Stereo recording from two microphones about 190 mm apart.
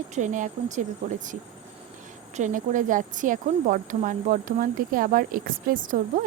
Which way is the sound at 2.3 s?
40° right (ahead or behind).